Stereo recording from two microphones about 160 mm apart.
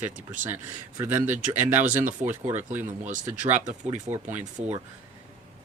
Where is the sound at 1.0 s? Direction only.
15° right (ahead or behind).